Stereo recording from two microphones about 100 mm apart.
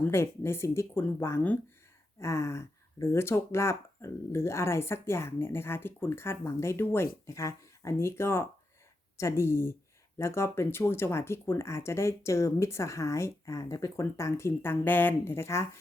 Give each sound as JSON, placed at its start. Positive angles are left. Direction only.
{"t": 0.0, "sound": "speech", "side_deg": 25}